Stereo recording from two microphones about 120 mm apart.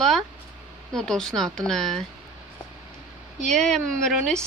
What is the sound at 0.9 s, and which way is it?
Speech, 5° left (ahead or behind).